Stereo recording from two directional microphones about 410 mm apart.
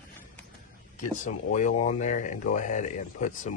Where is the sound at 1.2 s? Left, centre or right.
Centre.